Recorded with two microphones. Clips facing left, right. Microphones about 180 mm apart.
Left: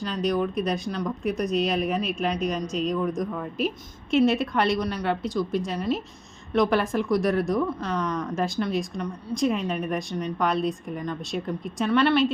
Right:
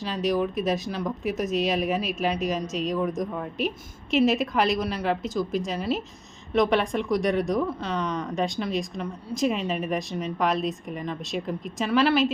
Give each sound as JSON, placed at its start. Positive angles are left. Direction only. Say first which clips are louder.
{"t": 0.0, "sound": "speech", "louder": "even", "side_deg": 0}